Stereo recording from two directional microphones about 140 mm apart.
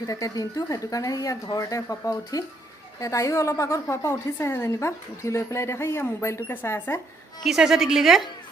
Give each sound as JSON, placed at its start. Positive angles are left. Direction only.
{"t": 0.0, "sound": "a woman's voice", "side_deg": 25}
{"t": 7.4, "sound": "a woman's voice", "side_deg": -5}